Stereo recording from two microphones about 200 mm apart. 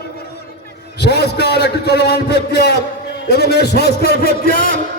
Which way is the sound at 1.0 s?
55° left (ahead or behind).